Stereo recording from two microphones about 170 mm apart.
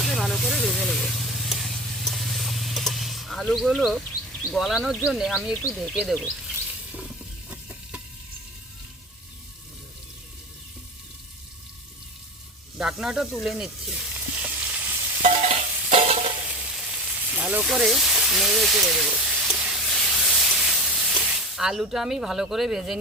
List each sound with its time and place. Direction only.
0.1 s vehicle: centre (ahead or behind)
4.4 s speech: centre (ahead or behind)
7.5 s stir: 10° right (ahead or behind)
13.0 s sizzle: centre (ahead or behind)
15.2 s stir: 45° right (ahead or behind)
16.9 s sizzle: 10° right (ahead or behind)